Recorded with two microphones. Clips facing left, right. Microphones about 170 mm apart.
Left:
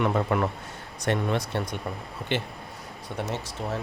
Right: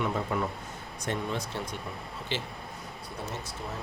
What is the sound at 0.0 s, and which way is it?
Speech, 70° left (ahead or behind).